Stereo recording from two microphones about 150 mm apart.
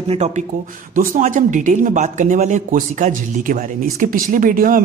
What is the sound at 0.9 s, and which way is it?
Speech, 60° right (ahead or behind).